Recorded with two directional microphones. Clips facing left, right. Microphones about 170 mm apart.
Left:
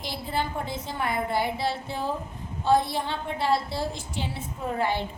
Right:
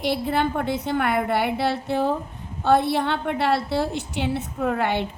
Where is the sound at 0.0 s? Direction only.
65° right (ahead or behind).